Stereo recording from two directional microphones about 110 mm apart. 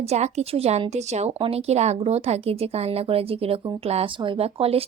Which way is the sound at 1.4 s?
65° right (ahead or behind).